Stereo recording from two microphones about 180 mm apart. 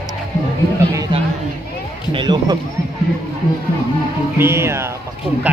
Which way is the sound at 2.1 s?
25° right (ahead or behind).